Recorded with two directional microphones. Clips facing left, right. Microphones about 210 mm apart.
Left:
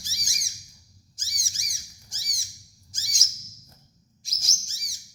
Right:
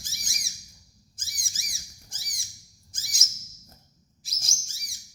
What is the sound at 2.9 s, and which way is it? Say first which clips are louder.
Bird: left 1 dB; 55° right (ahead or behind).